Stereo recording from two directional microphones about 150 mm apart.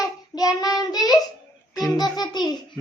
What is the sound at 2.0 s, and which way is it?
Music, 25° left (ahead or behind).